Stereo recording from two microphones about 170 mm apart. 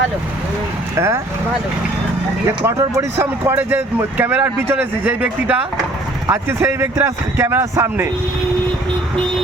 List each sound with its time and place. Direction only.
0.9 s speech: 15° right (ahead or behind)
2.6 s speech: 15° right (ahead or behind)